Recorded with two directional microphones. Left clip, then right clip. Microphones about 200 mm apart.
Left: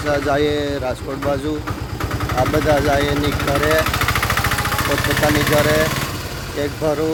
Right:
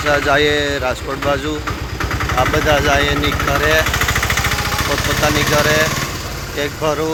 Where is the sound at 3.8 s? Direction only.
15° right (ahead or behind); by 5.5 s 10° left (ahead or behind).